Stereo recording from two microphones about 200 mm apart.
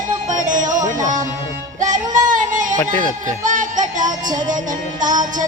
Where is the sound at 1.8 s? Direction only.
40° right (ahead or behind).